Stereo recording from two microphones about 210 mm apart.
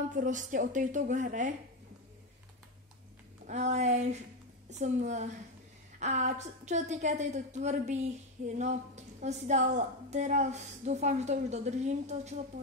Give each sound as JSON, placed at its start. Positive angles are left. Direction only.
{"t": 0.1, "sound": "a woman's voice", "side_deg": -35}
{"t": 3.4, "sound": "a woman's voice", "side_deg": -35}